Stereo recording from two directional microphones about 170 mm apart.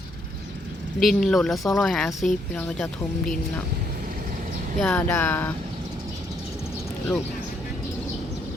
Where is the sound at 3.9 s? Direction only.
60° right (ahead or behind).